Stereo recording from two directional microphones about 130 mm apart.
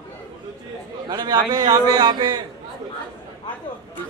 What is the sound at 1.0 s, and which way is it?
A man's voice, 30° right (ahead or behind).